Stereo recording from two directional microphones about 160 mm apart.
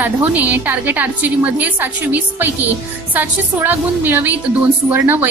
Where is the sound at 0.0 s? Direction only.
10° right (ahead or behind).